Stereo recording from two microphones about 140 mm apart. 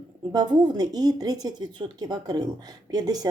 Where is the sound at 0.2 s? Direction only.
30° right (ahead or behind).